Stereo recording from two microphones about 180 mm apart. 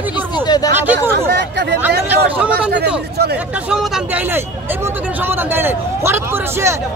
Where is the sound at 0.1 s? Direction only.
25° left (ahead or behind).